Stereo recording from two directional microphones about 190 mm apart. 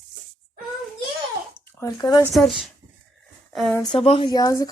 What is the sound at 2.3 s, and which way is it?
Speech, centre (ahead or behind).